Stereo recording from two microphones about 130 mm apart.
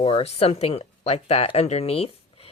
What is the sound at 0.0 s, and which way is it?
A woman's voice, 45° left (ahead or behind).